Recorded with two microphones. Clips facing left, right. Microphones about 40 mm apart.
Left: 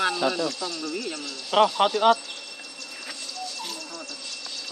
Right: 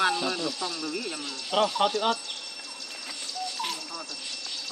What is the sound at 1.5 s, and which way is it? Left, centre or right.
Speech, left.